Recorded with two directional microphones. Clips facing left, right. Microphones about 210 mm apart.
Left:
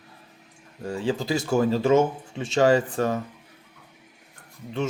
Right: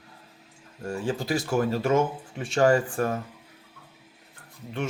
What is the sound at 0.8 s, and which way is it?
Speech, 20° left (ahead or behind).